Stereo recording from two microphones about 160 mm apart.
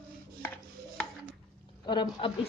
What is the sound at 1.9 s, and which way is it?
Speech, 30° left (ahead or behind).